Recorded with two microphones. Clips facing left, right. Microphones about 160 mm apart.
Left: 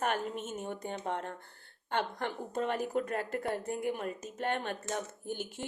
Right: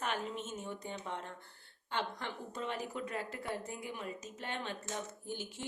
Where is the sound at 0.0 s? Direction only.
50° left (ahead or behind).